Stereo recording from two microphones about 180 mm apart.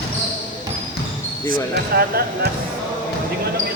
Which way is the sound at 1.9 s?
55° right (ahead or behind).